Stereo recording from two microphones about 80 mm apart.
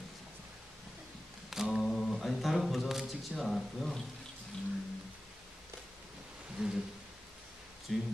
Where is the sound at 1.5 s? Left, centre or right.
Centre.